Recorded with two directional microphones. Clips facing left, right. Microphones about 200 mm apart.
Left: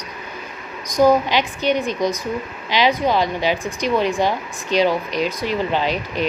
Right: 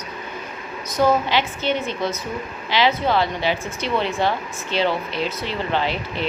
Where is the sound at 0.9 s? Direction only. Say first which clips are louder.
Left 4 dB; 15° left (ahead or behind).